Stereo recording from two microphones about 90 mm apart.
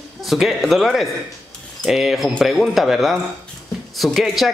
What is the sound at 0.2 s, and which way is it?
Speech, centre (ahead or behind).